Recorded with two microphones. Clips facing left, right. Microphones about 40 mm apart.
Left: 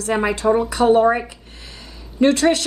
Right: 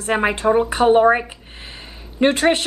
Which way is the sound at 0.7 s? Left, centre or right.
Right.